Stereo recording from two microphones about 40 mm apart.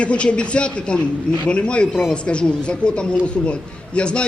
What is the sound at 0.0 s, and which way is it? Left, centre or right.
A man's voice, left.